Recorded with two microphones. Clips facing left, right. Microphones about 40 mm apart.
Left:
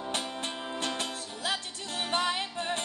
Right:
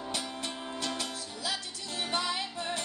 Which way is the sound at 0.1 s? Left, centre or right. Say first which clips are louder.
Left 2 dB; left.